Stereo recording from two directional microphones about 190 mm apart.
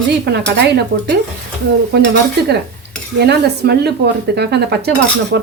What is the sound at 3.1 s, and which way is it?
Cutlery, 60° right (ahead or behind).